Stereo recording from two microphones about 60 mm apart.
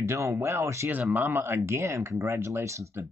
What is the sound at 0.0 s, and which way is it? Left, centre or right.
Speech, right.